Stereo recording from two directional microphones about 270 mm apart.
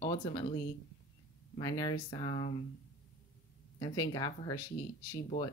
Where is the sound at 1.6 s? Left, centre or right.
Centre.